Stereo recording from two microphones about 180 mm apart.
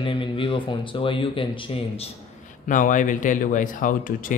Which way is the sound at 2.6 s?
45° left (ahead or behind).